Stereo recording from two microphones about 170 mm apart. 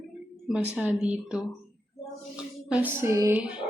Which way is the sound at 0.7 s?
5° right (ahead or behind).